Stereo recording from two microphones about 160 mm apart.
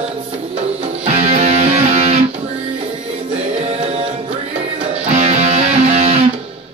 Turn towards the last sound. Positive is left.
turn(degrees=-45)  # may be behind; listen again after turning